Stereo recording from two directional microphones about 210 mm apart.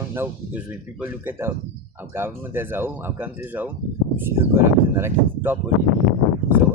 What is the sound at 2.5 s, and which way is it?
Speech, 10° right (ahead or behind).